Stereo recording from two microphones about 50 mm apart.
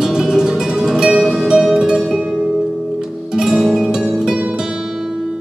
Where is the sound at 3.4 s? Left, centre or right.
Centre.